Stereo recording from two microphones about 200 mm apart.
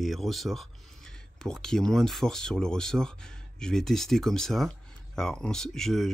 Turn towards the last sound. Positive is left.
turn(degrees=0)  # may be behind; listen again after turning